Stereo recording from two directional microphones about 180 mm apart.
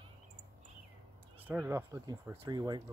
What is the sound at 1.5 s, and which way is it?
Speech, 10° right (ahead or behind).